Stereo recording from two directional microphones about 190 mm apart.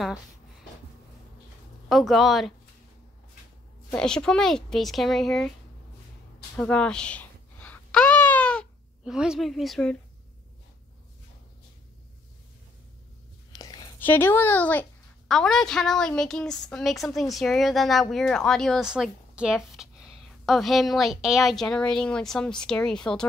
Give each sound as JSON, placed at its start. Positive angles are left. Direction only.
{"t": 1.9, "sound": "a woman's voice", "side_deg": 0}
{"t": 3.9, "sound": "a woman's voice", "side_deg": 5}
{"t": 6.5, "sound": "babbling", "side_deg": 5}
{"t": 13.5, "sound": "a sound", "side_deg": 20}
{"t": 13.9, "sound": "a woman's voice", "side_deg": 10}